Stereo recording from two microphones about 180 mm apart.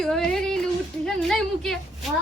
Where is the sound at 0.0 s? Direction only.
5° left (ahead or behind).